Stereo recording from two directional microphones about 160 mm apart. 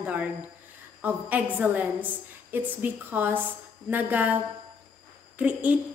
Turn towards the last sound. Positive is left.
turn(degrees=-10)  # may be behind; listen again after turning